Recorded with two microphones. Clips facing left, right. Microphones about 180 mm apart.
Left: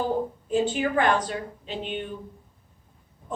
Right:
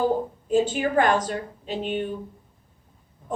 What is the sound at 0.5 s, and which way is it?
A woman's voice, 45° right (ahead or behind).